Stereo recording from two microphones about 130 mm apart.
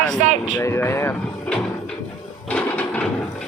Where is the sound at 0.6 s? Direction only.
20° left (ahead or behind).